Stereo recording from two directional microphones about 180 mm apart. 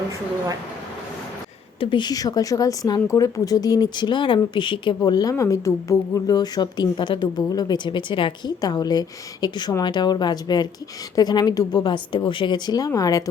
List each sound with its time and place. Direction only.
1.8 s speech: 25° left (ahead or behind)